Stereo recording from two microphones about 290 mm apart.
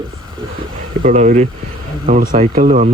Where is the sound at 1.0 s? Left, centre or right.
Right.